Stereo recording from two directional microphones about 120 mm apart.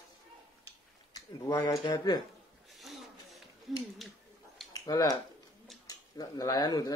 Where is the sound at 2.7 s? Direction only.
Centre (ahead or behind).